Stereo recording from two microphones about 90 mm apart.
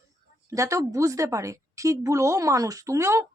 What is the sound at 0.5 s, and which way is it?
A woman's voice, 40° right (ahead or behind).